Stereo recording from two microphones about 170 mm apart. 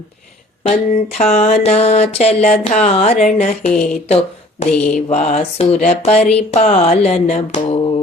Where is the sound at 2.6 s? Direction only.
45° left (ahead or behind).